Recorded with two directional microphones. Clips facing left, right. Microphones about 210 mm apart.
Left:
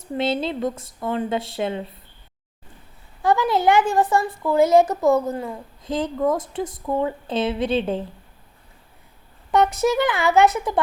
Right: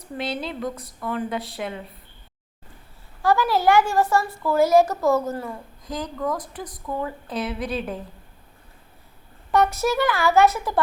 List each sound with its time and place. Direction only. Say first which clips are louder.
0.2 s a woman's voice: left 6 dB; 25° left (ahead or behind)
3.2 s a woman's voice: left 1 dB; 20° left (ahead or behind)
9.5 s a woman's voice: left 2 dB; 20° left (ahead or behind)